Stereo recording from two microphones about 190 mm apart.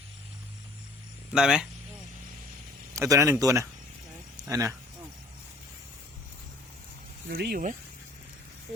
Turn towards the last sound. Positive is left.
turn(degrees=-55)  # may be behind; listen again after turning